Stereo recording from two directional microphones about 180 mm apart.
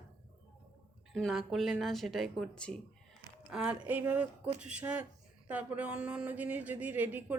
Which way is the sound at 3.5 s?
5° right (ahead or behind).